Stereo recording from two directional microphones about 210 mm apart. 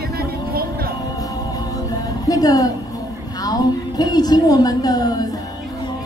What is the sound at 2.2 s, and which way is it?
Music, 15° left (ahead or behind).